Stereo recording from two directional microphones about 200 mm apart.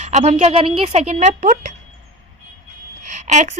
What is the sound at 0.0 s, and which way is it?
Speech, 35° right (ahead or behind).